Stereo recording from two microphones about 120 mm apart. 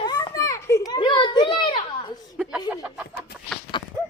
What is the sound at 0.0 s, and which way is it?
Children playing, 30° left (ahead or behind).